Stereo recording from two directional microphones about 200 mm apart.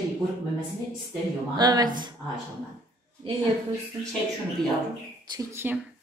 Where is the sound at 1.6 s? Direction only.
20° right (ahead or behind).